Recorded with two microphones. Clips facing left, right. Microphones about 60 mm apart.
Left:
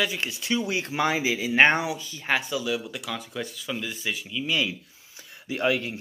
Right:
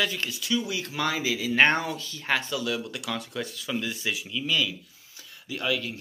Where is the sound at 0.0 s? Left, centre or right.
Centre.